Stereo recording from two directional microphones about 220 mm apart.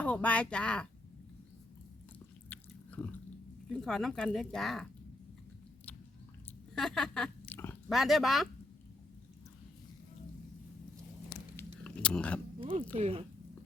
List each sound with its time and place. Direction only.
0.0 s speech: 5° left (ahead or behind)
2.1 s biting: 5° left (ahead or behind)
3.7 s speech: centre (ahead or behind)
6.7 s a sound: centre (ahead or behind)
7.9 s speech: centre (ahead or behind)
11.5 s chewing: 5° left (ahead or behind)
12.5 s a sound: 25° right (ahead or behind)
13.0 s speech: 25° right (ahead or behind)